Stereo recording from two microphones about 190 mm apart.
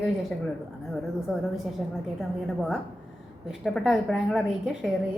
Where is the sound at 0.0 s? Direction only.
Centre (ahead or behind).